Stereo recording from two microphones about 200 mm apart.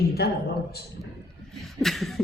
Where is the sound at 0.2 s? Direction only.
50° left (ahead or behind).